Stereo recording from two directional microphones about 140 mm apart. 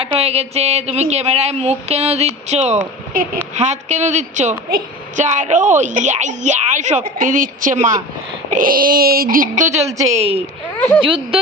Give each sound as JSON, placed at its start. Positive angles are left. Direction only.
{"t": 0.0, "sound": "speech", "side_deg": -45}
{"t": 3.1, "sound": "speech", "side_deg": -80}
{"t": 3.5, "sound": "a woman's voice", "side_deg": -55}
{"t": 7.2, "sound": "a woman's voice", "side_deg": -70}
{"t": 8.4, "sound": "speech", "side_deg": -75}
{"t": 9.7, "sound": "a woman's voice", "side_deg": -20}
{"t": 10.1, "sound": "speech", "side_deg": -45}